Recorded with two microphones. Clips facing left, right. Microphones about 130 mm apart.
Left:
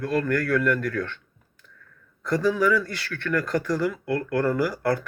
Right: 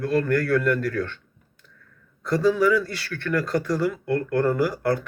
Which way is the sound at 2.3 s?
25° right (ahead or behind).